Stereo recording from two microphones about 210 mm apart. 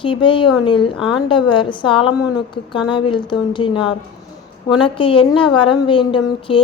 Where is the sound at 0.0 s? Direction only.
25° left (ahead or behind).